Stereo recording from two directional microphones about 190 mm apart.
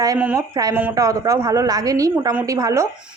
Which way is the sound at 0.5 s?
20° right (ahead or behind).